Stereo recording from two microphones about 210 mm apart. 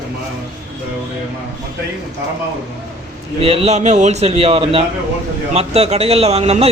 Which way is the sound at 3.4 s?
30° right (ahead or behind).